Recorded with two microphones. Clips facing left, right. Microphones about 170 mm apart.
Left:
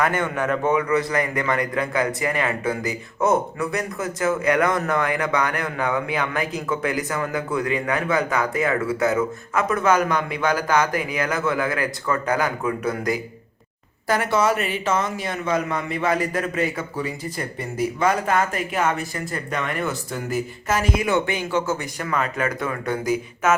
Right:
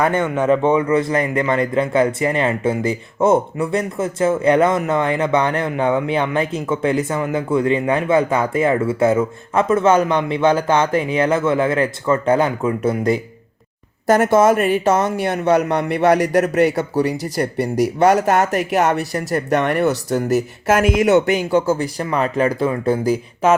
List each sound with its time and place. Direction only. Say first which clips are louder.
0.0 s a man's voice: right 5 dB; 25° right (ahead or behind)
14.1 s speech: right 7 dB; 50° right (ahead or behind)
15.0 s a man's voice: right 8 dB; 65° right (ahead or behind)
20.1 s a man's voice: right 10 dB; 40° right (ahead or behind)
20.3 s a man's voice: right 6 dB; 55° right (ahead or behind); by 23.6 s 30° right (ahead or behind)